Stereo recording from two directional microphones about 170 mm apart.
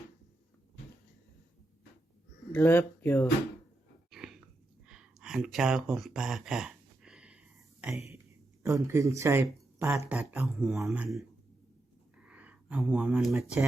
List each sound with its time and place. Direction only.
2.5 s speech: 10° left (ahead or behind)
4.1 s a sound: 5° right (ahead or behind)
8.6 s speech: 15° right (ahead or behind)